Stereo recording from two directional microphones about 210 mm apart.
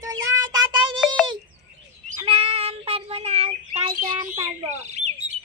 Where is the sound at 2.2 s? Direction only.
25° right (ahead or behind).